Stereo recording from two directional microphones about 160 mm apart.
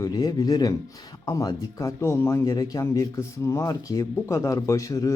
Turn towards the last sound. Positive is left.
turn(degrees=20)  # may be behind; listen again after turning